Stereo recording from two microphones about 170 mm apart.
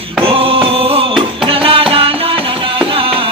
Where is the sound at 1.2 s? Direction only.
30° right (ahead or behind).